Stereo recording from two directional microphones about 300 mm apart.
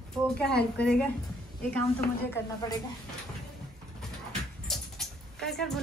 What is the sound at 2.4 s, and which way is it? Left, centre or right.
Speech, centre.